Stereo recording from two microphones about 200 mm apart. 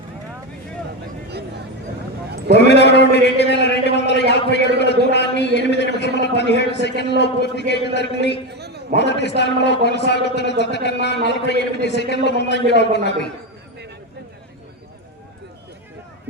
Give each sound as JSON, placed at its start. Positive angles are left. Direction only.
{"t": 2.5, "sound": "a man's voice", "side_deg": 60}
{"t": 8.5, "sound": "a sound", "side_deg": -55}
{"t": 9.0, "sound": "a man's voice", "side_deg": 60}